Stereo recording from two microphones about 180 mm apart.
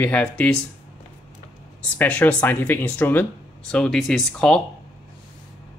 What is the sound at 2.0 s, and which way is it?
Speech, 10° left (ahead or behind).